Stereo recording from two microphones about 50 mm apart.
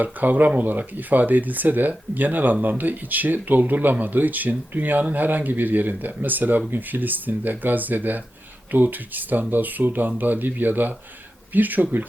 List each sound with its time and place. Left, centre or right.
0.0 s speech: right